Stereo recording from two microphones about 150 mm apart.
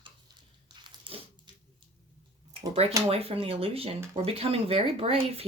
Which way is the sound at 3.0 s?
40° right (ahead or behind).